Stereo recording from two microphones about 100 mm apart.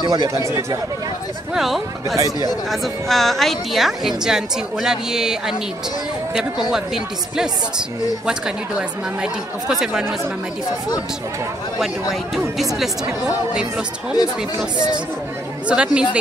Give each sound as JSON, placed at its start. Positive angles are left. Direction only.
{"t": 0.1, "sound": "speech", "side_deg": -40}
{"t": 1.5, "sound": "a woman's voice", "side_deg": 0}
{"t": 6.7, "sound": "a woman's voice", "side_deg": -5}
{"t": 11.8, "sound": "a woman's voice", "side_deg": 0}
{"t": 15.7, "sound": "speech", "side_deg": -10}